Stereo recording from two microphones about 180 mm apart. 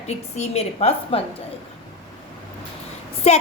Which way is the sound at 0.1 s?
35° left (ahead or behind).